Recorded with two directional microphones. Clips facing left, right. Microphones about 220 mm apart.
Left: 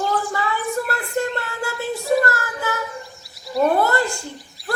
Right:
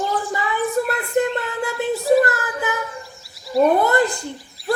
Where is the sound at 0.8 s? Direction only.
20° right (ahead or behind).